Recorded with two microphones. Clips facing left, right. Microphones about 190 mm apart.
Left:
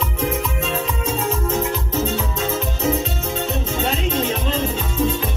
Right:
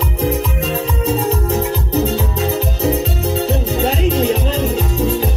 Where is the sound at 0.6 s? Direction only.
35° right (ahead or behind).